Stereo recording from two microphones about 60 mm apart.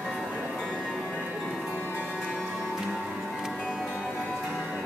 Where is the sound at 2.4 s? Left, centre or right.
Centre.